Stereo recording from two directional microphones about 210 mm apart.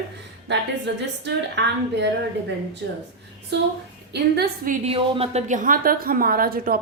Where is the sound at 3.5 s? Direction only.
55° right (ahead or behind).